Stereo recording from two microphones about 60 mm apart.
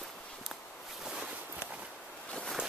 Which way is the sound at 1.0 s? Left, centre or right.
Centre.